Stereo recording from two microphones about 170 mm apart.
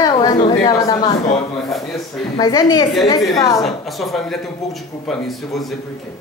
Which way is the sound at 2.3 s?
25° left (ahead or behind).